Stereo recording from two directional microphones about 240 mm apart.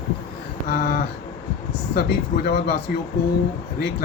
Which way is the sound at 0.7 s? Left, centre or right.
Left.